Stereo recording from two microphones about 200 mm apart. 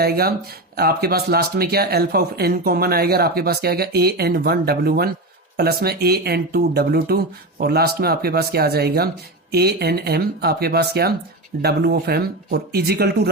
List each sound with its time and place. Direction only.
0.0 s speech: 50° right (ahead or behind)